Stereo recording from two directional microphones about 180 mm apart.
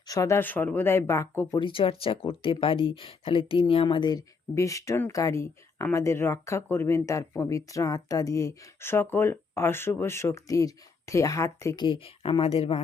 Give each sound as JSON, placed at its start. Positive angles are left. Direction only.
{"t": 0.1, "sound": "speech", "side_deg": 15}